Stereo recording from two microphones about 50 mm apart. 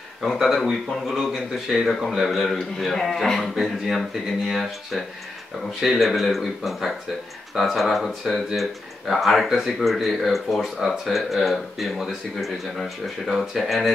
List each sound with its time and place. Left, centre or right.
0.2 s a man's voice: centre